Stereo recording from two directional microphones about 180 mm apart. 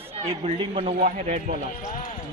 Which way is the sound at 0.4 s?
35° right (ahead or behind).